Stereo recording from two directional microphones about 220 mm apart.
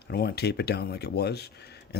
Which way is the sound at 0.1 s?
45° left (ahead or behind).